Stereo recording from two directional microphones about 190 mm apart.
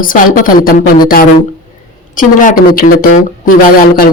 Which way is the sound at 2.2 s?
45° left (ahead or behind).